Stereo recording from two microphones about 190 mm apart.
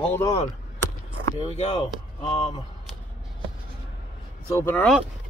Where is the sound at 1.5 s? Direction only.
30° left (ahead or behind).